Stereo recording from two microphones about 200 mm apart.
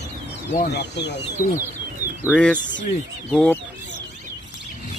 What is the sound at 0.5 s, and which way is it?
Speech, 55° left (ahead or behind).